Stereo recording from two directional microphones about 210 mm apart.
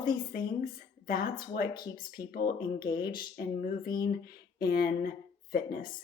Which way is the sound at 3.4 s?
45° left (ahead or behind).